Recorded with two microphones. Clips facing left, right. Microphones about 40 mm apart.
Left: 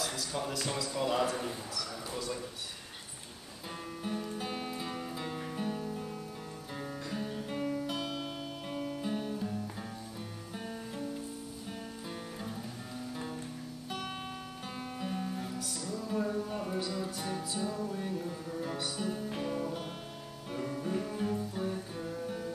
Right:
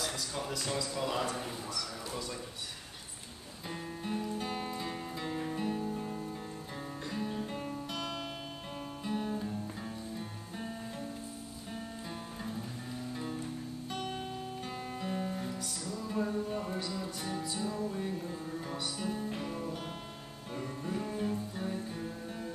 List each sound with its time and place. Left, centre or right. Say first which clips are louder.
0.0 s a sound: left 1 dB; centre
0.4 s a man's voice: left 1 dB; centre
4.0 s music: right 1 dB; centre
13.1 s music: right 1 dB; centre
14.0 s music: right 1 dB; left
14.6 s music: even; centre
21.0 s music: left 1 dB; centre